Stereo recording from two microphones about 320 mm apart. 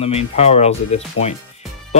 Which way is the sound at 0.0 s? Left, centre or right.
Centre.